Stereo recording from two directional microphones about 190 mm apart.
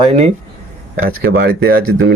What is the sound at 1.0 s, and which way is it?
Speech, 50° right (ahead or behind).